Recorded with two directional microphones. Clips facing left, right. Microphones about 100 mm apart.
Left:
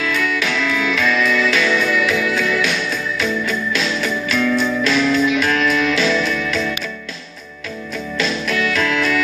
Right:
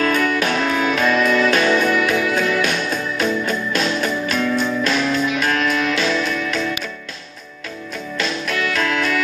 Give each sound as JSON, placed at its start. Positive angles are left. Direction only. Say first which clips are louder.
{"t": 0.0, "sound": "music", "louder": "right 3 dB", "side_deg": -45}
{"t": 8.2, "sound": "music", "louder": "left 2 dB", "side_deg": -45}